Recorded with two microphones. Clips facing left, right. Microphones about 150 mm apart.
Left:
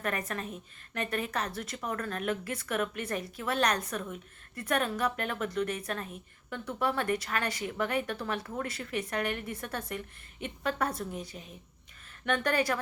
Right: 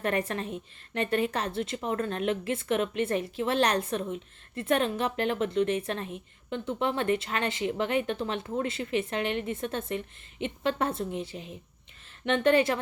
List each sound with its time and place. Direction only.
0.0 s speech: 30° right (ahead or behind)